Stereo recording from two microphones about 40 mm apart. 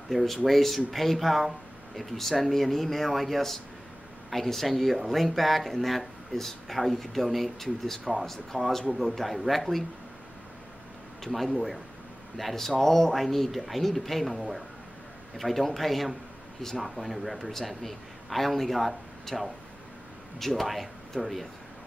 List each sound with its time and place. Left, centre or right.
0.1 s speech: centre
11.3 s speech: centre